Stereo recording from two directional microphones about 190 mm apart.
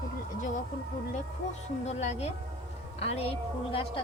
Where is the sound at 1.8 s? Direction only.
35° left (ahead or behind).